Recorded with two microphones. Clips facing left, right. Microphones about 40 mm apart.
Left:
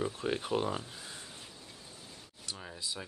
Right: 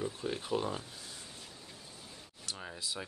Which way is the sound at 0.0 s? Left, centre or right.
Left.